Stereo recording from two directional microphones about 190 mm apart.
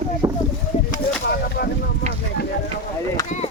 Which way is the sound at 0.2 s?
20° right (ahead or behind).